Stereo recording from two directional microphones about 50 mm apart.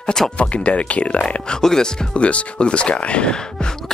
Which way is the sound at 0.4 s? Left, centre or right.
Left.